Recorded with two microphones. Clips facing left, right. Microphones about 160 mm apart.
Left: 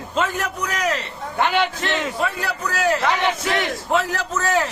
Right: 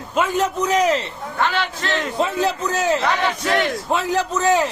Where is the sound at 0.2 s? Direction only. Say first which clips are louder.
Right 4 dB; 20° right (ahead or behind).